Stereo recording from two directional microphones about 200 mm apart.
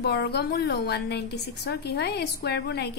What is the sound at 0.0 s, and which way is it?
A woman's voice, 55° left (ahead or behind).